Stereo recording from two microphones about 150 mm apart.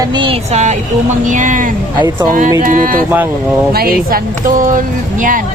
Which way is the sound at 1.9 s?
30° right (ahead or behind).